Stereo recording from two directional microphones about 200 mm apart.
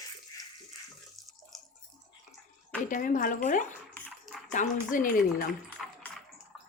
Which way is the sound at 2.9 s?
40° left (ahead or behind).